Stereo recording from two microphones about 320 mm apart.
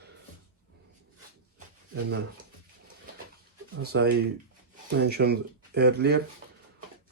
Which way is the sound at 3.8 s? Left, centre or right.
Right.